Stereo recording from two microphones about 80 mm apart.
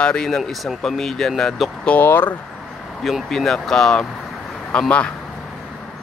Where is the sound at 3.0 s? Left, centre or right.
Centre.